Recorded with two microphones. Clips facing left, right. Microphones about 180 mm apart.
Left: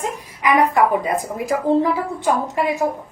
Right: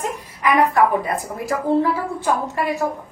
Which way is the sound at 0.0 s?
20° left (ahead or behind).